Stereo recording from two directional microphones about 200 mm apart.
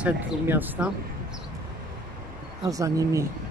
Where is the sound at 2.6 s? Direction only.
15° right (ahead or behind).